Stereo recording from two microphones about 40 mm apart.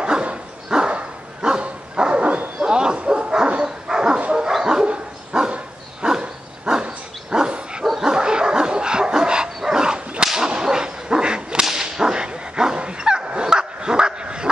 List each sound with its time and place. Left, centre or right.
0.0 s dog: right
0.9 s bow-wow: right
3.6 s dog: centre
8.0 s bow-wow: centre
9.6 s dog: centre
10.2 s whip: centre